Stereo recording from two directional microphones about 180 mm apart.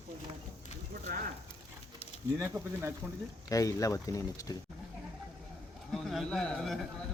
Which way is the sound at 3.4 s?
20° left (ahead or behind).